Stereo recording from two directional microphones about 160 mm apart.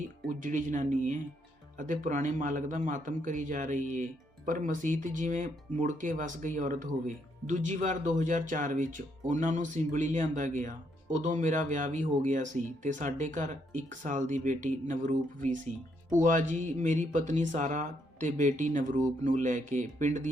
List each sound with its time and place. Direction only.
0.3 s a man's voice: 55° right (ahead or behind)